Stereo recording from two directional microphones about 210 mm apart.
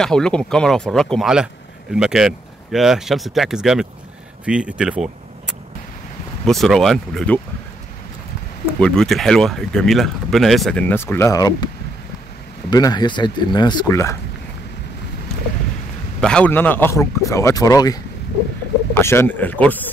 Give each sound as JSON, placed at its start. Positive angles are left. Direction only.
{"t": 0.0, "sound": "speech", "side_deg": 5}
{"t": 8.7, "sound": "speech", "side_deg": 5}
{"t": 16.2, "sound": "a man's voice", "side_deg": 5}